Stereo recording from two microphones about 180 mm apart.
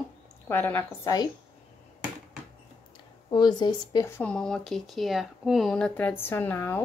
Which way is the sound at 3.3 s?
25° left (ahead or behind).